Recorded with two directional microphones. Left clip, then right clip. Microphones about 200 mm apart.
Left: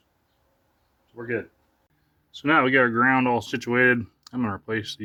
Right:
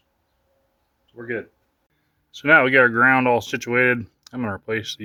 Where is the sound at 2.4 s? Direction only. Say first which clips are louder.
Right 5 dB; 20° right (ahead or behind).